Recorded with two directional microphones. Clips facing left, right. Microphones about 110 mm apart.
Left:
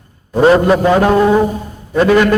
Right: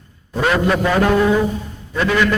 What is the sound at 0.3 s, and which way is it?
A man's voice, 35° left (ahead or behind).